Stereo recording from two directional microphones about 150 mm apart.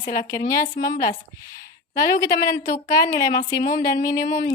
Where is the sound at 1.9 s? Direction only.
20° left (ahead or behind).